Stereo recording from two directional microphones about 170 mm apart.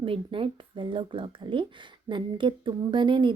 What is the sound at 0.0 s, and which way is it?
A woman's voice, 30° right (ahead or behind).